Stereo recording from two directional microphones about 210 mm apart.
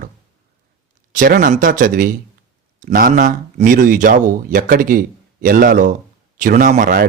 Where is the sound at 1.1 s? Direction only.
40° right (ahead or behind).